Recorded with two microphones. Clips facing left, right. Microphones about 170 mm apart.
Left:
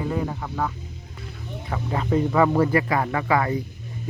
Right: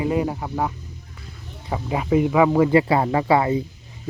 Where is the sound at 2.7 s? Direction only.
25° right (ahead or behind).